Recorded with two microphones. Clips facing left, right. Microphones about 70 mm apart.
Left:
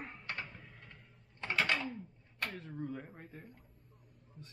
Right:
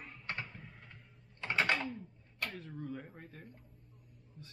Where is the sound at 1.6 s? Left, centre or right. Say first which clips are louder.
Right 2 dB; right.